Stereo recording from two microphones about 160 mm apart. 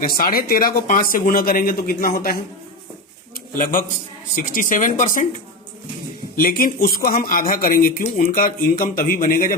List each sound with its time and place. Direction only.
0.0 s speech: 65° left (ahead or behind)
3.5 s speech: 60° left (ahead or behind)
6.3 s speech: 65° left (ahead or behind)